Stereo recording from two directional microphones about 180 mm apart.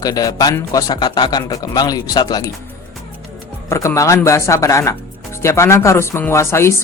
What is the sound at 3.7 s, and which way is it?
Speech, 15° left (ahead or behind).